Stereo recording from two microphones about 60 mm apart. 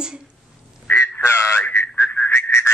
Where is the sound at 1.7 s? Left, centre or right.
Left.